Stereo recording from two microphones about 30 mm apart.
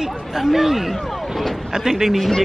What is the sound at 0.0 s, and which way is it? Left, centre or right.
Speech, centre.